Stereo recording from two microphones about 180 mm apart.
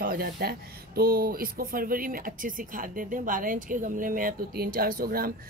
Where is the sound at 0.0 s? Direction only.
55° right (ahead or behind).